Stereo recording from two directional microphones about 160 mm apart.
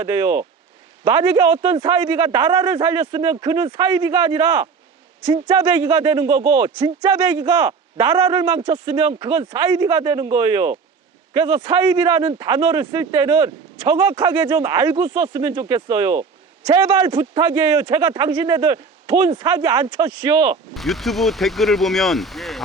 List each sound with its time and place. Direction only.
0.0 s speech: 20° right (ahead or behind)
16.6 s speech: 30° right (ahead or behind)
20.7 s speech: centre (ahead or behind)